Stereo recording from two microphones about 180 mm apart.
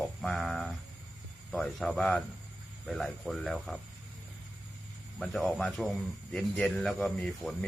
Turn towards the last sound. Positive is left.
turn(degrees=5)  # may be behind; listen again after turning